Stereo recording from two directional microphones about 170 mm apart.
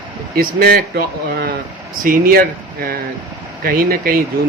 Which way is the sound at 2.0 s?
55° right (ahead or behind).